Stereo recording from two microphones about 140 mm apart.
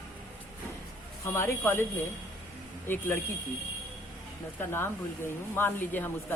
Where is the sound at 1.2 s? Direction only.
20° left (ahead or behind).